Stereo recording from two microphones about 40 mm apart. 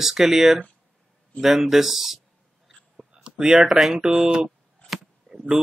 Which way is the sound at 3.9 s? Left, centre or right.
Centre.